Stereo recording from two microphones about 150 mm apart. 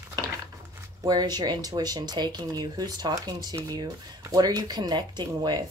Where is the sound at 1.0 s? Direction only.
25° right (ahead or behind).